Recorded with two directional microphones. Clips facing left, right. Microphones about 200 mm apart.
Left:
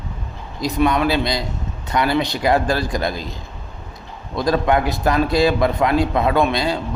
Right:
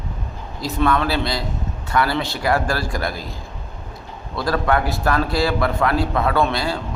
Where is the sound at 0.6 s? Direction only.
15° left (ahead or behind).